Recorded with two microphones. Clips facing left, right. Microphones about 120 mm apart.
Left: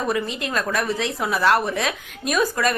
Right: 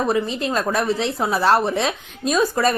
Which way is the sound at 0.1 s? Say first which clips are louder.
Right 3 dB; 30° right (ahead or behind).